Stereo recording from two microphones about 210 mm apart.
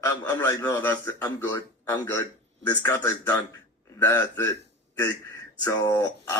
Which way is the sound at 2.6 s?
15° left (ahead or behind).